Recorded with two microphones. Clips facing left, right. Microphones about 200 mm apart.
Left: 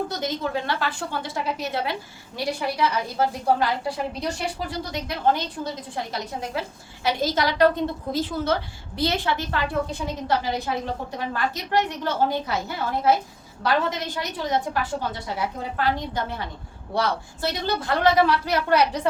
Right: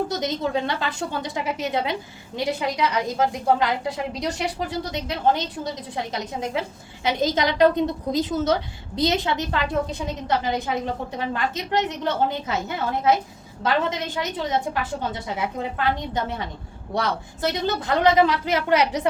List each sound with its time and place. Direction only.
0.2 s a woman's voice: 20° right (ahead or behind)